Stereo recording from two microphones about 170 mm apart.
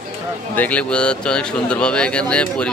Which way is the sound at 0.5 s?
10° left (ahead or behind).